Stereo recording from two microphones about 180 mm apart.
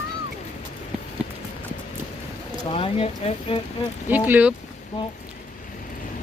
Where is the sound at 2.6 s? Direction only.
30° left (ahead or behind).